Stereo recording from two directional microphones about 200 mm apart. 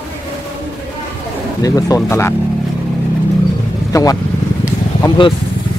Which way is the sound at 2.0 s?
15° left (ahead or behind).